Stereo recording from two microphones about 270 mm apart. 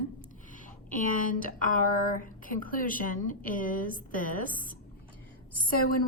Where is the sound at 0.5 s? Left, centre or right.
Left.